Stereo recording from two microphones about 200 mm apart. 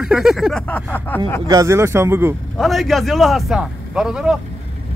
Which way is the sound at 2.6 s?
Centre (ahead or behind).